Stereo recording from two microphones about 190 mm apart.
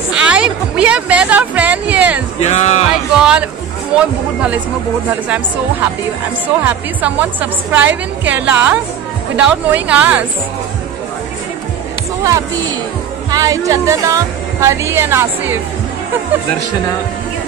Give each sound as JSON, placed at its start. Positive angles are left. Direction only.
{"t": 0.1, "sound": "a sound", "side_deg": -5}
{"t": 2.4, "sound": "music", "side_deg": 35}
{"t": 3.2, "sound": "music", "side_deg": -5}
{"t": 3.9, "sound": "a woman's voice", "side_deg": -5}
{"t": 6.4, "sound": "a woman's voice", "side_deg": -10}
{"t": 13.3, "sound": "a woman's voice", "side_deg": -20}